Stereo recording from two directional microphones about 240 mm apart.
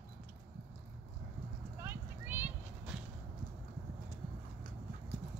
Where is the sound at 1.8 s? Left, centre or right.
Centre.